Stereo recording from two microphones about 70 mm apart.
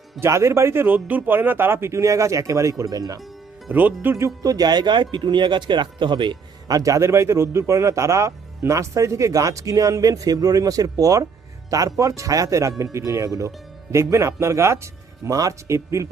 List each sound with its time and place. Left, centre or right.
0.2 s speech: right
3.7 s speech: right
4.4 s speech: right
6.7 s speech: right
15.2 s speech: right
15.6 s speech: right